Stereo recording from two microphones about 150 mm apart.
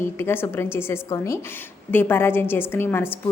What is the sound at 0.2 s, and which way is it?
A woman's voice, 15° left (ahead or behind).